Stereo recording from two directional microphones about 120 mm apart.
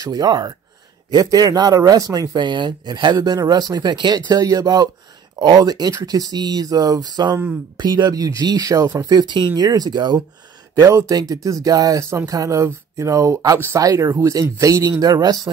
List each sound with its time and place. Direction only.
0.0 s speech: 35° right (ahead or behind)